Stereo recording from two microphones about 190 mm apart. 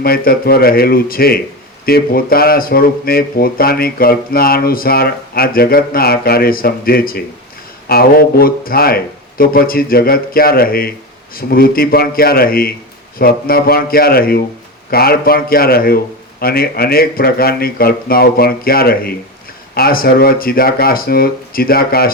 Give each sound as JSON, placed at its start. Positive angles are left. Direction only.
{"t": 0.0, "sound": "speech", "side_deg": 50}